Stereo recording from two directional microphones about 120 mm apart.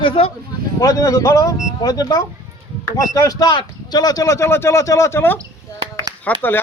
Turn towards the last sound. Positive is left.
turn(degrees=15)  # may be behind; listen again after turning